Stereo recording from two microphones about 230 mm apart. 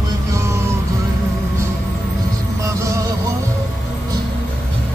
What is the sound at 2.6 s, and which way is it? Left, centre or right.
Music, centre.